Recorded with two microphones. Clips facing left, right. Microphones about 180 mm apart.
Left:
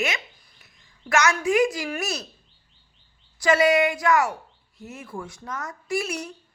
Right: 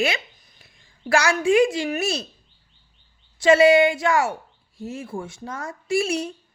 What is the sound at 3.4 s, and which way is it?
A woman's voice, 25° right (ahead or behind).